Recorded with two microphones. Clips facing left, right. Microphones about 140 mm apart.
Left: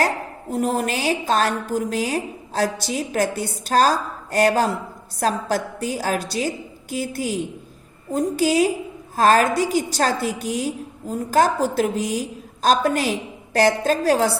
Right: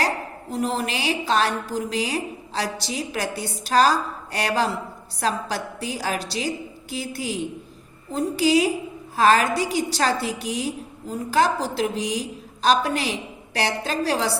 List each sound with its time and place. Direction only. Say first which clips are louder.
0.5 s a woman's voice: left 3 dB; 50° left (ahead or behind)